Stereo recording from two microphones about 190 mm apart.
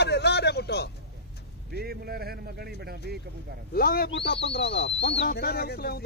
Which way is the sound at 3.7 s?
50° left (ahead or behind).